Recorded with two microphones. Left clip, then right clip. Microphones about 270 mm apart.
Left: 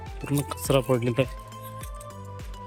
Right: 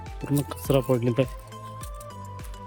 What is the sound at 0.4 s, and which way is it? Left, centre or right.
Speech, centre.